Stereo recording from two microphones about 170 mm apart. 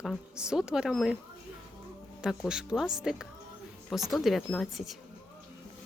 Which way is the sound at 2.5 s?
5° right (ahead or behind).